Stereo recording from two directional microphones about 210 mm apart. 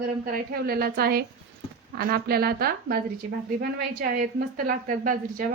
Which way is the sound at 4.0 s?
45° right (ahead or behind).